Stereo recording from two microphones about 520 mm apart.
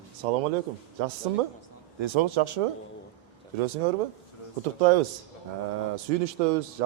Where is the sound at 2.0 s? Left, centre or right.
Right.